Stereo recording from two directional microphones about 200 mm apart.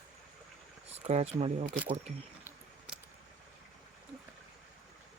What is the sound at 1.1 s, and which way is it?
Speech, 35° right (ahead or behind).